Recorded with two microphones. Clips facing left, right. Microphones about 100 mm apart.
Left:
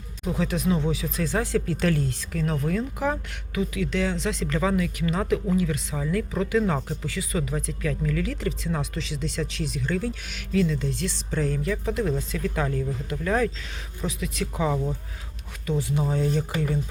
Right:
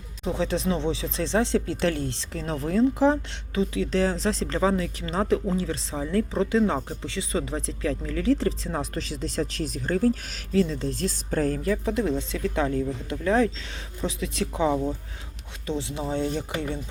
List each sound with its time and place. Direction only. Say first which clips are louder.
0.3 s speech: even; 30° right (ahead or behind)